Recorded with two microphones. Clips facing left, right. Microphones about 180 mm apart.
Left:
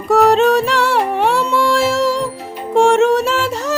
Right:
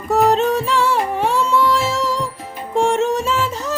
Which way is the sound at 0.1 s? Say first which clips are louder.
Left 4 dB; 80° left.